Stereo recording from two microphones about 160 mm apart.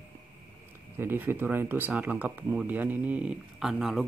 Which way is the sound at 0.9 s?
10° right (ahead or behind).